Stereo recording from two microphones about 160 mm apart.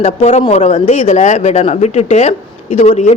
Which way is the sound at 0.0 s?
40° left (ahead or behind).